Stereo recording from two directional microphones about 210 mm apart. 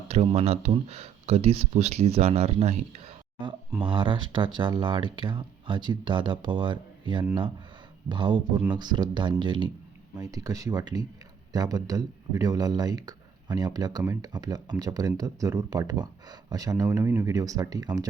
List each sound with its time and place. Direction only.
0.1 s speech: 30° right (ahead or behind)